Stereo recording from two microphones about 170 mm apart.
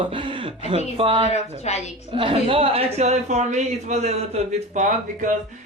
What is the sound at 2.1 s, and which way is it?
Speech, 30° right (ahead or behind).